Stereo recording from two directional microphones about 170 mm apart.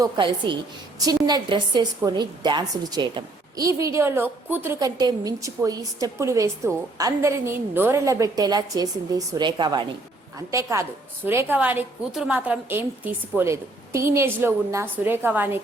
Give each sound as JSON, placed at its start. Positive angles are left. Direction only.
{"t": 0.0, "sound": "a woman's voice", "side_deg": -30}